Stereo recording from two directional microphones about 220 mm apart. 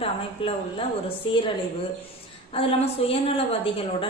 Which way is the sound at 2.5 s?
25° left (ahead or behind).